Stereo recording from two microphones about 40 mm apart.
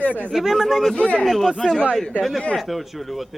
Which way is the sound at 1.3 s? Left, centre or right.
Centre.